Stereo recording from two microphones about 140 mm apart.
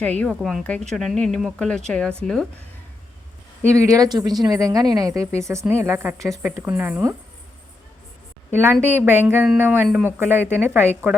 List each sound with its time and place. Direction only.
0.0 s speech: 10° left (ahead or behind)
0.3 s speech: centre (ahead or behind)
3.6 s a woman's voice: 20° right (ahead or behind)
8.6 s a woman's voice: 15° right (ahead or behind)